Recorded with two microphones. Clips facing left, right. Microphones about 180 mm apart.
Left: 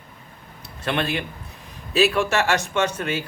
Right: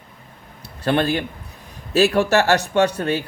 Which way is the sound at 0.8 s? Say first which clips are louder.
Right 5 dB; 35° right (ahead or behind).